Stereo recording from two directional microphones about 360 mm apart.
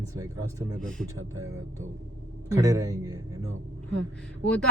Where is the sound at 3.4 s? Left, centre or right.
Right.